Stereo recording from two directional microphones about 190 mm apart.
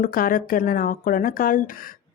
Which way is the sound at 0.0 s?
50° left (ahead or behind).